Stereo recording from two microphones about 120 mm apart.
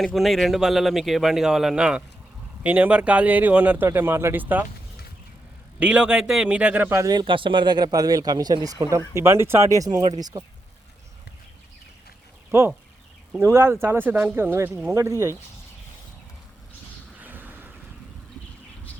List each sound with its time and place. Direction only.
0.0 s speech: centre (ahead or behind); by 4.6 s 15° right (ahead or behind)
5.8 s speech: 10° right (ahead or behind)
7.0 s speech: 35° right (ahead or behind)
12.5 s speech: 20° right (ahead or behind)
17.2 s a sound: 15° right (ahead or behind)